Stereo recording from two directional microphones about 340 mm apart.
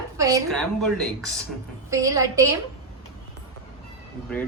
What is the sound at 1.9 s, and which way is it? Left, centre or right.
Speech, centre.